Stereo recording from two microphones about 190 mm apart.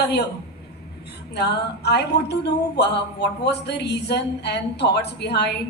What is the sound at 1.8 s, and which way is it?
Speech, 60° left (ahead or behind).